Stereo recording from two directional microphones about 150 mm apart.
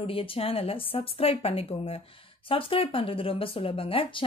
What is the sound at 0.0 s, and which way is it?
Speech, 40° left (ahead or behind).